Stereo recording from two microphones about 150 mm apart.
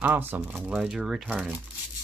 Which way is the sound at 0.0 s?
15° right (ahead or behind).